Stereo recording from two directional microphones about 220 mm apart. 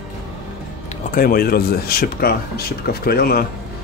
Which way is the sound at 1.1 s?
40° left (ahead or behind).